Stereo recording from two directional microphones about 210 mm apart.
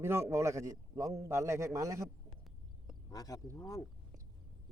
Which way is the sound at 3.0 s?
15° left (ahead or behind).